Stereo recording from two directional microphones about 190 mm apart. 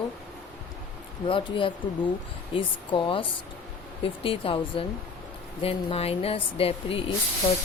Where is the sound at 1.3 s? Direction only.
25° left (ahead or behind).